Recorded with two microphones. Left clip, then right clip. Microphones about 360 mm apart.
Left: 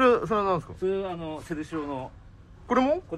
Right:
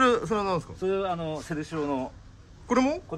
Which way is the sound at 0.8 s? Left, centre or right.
Right.